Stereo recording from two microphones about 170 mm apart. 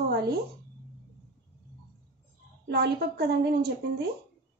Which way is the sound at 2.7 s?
75° right (ahead or behind).